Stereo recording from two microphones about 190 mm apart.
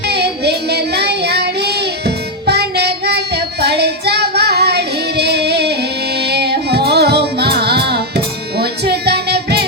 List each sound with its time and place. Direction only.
0.0 s child singing: 60° right (ahead or behind)